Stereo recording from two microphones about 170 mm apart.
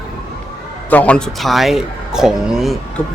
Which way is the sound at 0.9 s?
10° left (ahead or behind).